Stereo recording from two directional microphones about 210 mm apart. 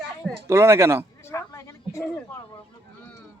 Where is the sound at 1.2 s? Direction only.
15° left (ahead or behind).